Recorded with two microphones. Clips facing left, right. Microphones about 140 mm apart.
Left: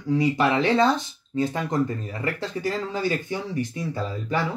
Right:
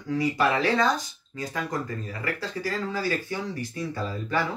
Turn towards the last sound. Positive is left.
turn(degrees=15)  # may be behind; listen again after turning